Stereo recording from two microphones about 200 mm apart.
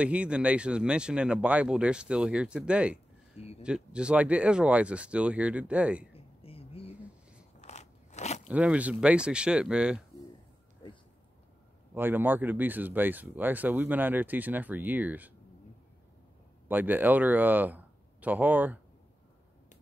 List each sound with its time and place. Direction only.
0.0 s speech: 5° right (ahead or behind)
3.3 s speech: 30° left (ahead or behind)
3.6 s speech: 5° right (ahead or behind)
6.1 s a sound: 30° left (ahead or behind)
7.6 s biting: 35° left (ahead or behind)
8.5 s speech: 5° right (ahead or behind)
11.9 s speech: 10° right (ahead or behind)
16.6 s speech: 10° right (ahead or behind)